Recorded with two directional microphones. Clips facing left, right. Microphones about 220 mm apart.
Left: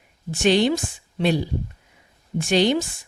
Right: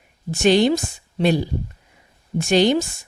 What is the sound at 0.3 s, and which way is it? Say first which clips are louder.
Speech: right 3 dB; 45° right (ahead or behind).